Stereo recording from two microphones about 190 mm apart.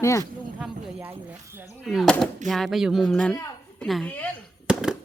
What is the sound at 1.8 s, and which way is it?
Speech, centre (ahead or behind).